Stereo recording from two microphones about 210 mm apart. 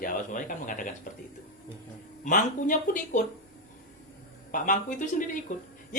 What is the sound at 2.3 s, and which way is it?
Speech, 40° left (ahead or behind).